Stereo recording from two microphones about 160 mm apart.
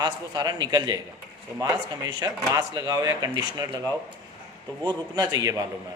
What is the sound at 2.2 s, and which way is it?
A man's voice, 20° right (ahead or behind).